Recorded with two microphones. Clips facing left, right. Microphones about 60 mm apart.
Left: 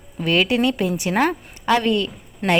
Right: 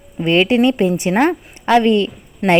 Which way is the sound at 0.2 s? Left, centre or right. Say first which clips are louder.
Right 5 dB; right.